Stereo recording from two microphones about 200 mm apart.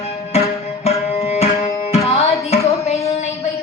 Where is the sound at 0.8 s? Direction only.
30° left (ahead or behind).